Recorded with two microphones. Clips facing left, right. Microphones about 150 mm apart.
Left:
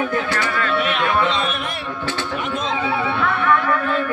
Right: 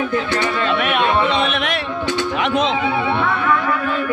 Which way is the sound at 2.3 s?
85° right.